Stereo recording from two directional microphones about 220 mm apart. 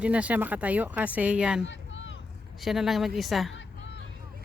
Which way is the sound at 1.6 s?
55° left (ahead or behind).